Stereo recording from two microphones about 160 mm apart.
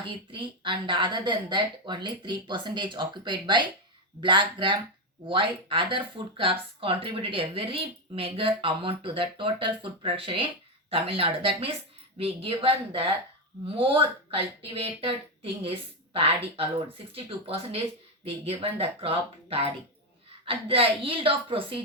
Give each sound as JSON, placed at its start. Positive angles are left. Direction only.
{"t": 0.0, "sound": "a woman's voice", "side_deg": -30}